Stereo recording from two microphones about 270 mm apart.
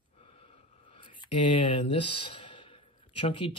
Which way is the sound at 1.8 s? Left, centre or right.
Centre.